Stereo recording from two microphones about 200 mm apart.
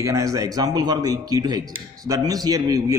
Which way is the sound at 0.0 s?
15° right (ahead or behind).